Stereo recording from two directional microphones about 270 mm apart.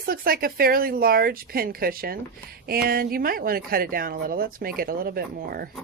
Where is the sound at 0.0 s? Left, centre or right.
Right.